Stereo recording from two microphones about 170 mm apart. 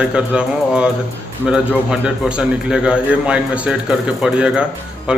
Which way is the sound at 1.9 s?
5° right (ahead or behind).